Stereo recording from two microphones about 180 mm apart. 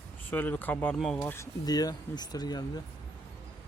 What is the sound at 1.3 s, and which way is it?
Speech, 20° left (ahead or behind).